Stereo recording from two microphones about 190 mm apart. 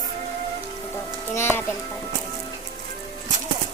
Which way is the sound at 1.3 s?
10° left (ahead or behind).